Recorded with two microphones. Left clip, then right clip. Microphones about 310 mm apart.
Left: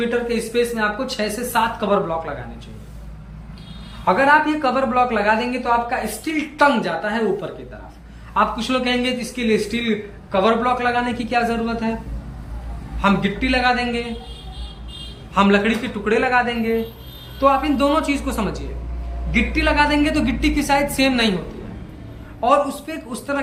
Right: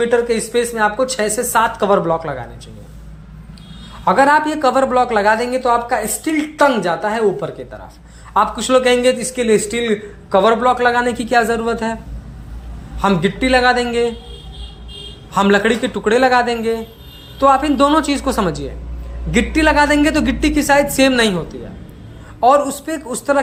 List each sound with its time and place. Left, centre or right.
0.1 s a man's voice: centre
4.0 s a man's voice: centre
13.0 s a man's voice: centre
15.3 s a man's voice: centre
22.4 s a man's voice: centre